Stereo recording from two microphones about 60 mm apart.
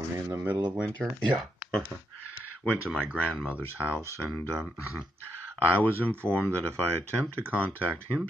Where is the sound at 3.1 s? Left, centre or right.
Centre.